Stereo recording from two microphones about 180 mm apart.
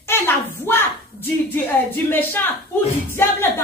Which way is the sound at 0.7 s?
15° left (ahead or behind).